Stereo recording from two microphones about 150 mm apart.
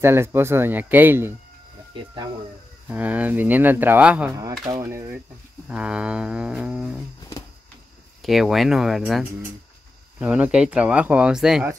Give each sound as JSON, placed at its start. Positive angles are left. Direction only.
{"t": 0.0, "sound": "speech", "side_deg": -15}
{"t": 2.9, "sound": "speech", "side_deg": -10}
{"t": 4.4, "sound": "speech", "side_deg": -25}
{"t": 4.8, "sound": "speech", "side_deg": -15}
{"t": 8.2, "sound": "speech", "side_deg": 0}